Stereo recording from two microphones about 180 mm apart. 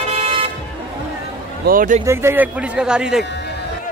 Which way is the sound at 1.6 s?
50° right (ahead or behind).